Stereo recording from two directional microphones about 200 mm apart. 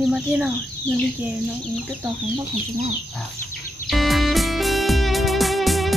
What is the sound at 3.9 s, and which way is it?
Music, centre (ahead or behind).